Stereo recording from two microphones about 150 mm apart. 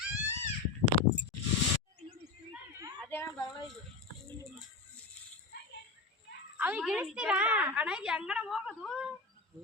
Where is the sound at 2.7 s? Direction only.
20° right (ahead or behind).